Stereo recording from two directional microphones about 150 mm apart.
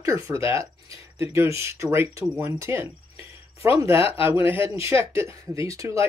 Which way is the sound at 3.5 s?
40° left (ahead or behind).